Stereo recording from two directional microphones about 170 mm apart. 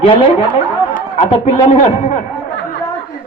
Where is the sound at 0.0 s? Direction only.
35° left (ahead or behind).